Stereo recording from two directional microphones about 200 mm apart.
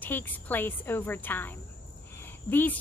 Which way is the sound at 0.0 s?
10° left (ahead or behind).